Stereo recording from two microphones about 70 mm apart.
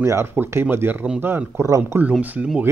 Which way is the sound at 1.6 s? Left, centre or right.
Right.